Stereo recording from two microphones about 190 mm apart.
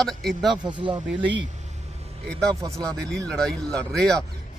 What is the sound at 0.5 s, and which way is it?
Speech, 25° right (ahead or behind).